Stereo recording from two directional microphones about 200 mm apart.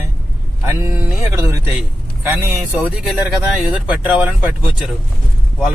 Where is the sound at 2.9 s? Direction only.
Centre (ahead or behind).